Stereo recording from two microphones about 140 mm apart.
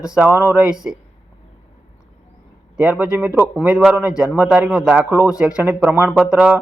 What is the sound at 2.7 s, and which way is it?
Speech, 10° right (ahead or behind).